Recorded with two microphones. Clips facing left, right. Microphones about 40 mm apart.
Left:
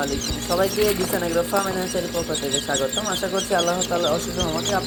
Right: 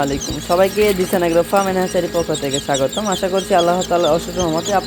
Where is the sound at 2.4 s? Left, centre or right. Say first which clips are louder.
Right 5 dB; right.